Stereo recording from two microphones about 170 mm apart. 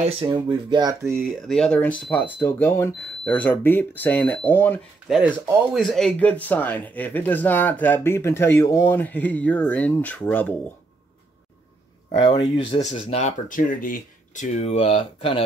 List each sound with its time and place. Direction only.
0.2 s speech: 25° right (ahead or behind)
1.5 s speech: 5° left (ahead or behind)
5.0 s speech: centre (ahead or behind)
12.2 s speech: 30° left (ahead or behind)
12.9 s speech: 45° left (ahead or behind)